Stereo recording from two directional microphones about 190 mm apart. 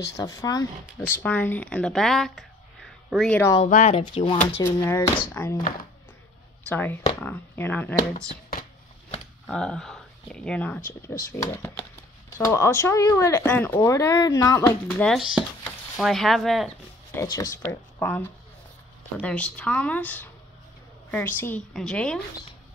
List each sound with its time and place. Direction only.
0.0 s speech: 15° left (ahead or behind)
3.6 s speech: 40° left (ahead or behind)
4.0 s speech: 25° left (ahead or behind)
4.6 s speech: 15° left (ahead or behind)
6.7 s speech: 10° left (ahead or behind)
9.5 s speech: 5° left (ahead or behind)
15.0 s speech: centre (ahead or behind)
17.1 s speech: 15° left (ahead or behind)